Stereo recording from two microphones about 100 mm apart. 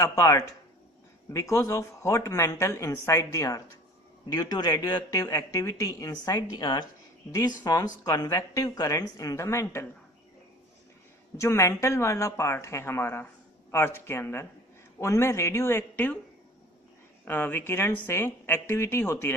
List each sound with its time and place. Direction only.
0.0 s speech: 35° left (ahead or behind)
11.3 s a woman's voice: 30° left (ahead or behind)
17.2 s a woman's voice: 20° left (ahead or behind)